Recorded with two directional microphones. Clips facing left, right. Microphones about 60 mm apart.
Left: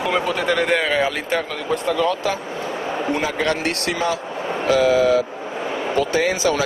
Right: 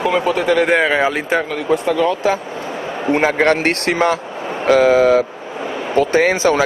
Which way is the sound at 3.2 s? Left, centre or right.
Right.